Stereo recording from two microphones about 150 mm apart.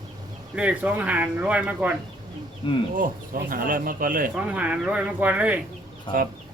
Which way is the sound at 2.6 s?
35° left (ahead or behind).